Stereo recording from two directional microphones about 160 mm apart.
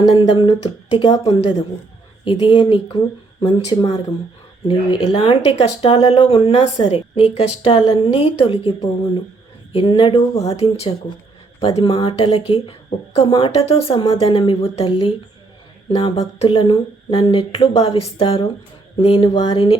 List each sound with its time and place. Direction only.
0.1 s a woman's voice: 35° left (ahead or behind)